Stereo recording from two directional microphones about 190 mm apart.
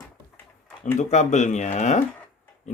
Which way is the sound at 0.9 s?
40° left (ahead or behind).